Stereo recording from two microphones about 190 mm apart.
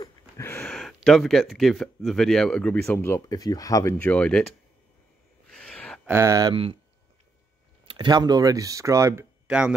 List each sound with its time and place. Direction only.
0.0 s a sound: 10° left (ahead or behind)
0.7 s speech: centre (ahead or behind)
5.5 s gasp: 5° left (ahead or behind)
6.0 s speech: 15° right (ahead or behind)
7.8 s speech: 25° right (ahead or behind); by 9.8 s 5° right (ahead or behind)